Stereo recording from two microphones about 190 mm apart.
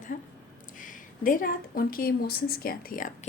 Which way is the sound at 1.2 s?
45° left (ahead or behind).